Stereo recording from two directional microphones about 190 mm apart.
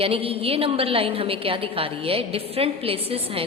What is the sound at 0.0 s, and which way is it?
A woman's voice, 30° right (ahead or behind).